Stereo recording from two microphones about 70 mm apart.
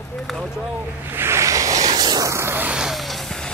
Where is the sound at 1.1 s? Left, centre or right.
Right.